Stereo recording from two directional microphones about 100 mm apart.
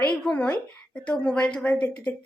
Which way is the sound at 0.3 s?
10° left (ahead or behind).